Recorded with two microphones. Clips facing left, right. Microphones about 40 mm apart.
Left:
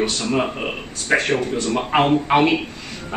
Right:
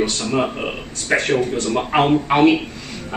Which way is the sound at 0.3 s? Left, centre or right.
Centre.